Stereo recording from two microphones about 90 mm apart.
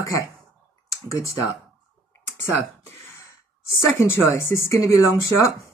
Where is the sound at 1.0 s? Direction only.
35° left (ahead or behind).